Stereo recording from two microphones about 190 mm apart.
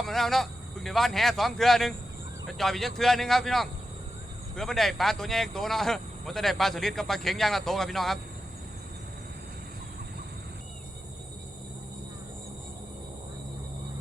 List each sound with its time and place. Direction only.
0.0 s speech: centre (ahead or behind)